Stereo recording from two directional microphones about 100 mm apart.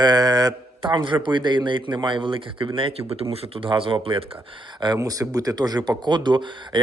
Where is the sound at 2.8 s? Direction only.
70° right (ahead or behind).